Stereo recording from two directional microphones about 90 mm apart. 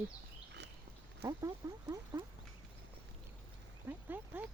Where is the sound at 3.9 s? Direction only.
20° right (ahead or behind).